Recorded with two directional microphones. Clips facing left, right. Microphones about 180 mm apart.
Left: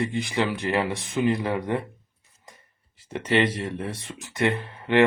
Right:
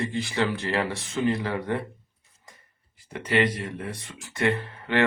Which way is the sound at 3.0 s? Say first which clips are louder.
Left 1 dB; 25° left (ahead or behind).